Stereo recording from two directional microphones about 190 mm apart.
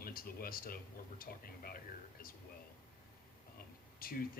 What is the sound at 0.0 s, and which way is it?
Speech, 50° left (ahead or behind).